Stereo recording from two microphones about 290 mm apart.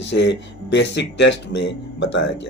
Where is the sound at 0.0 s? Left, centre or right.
Left.